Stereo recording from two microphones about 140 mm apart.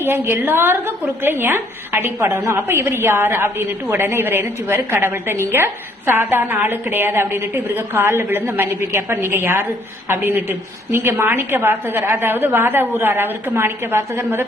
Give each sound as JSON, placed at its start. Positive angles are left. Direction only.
{"t": 0.0, "sound": "a woman's voice", "side_deg": -15}